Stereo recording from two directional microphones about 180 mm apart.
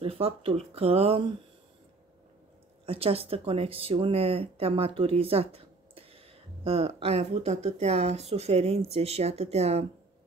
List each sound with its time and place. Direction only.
0.0 s speech: 30° right (ahead or behind)
2.8 s speech: 35° right (ahead or behind)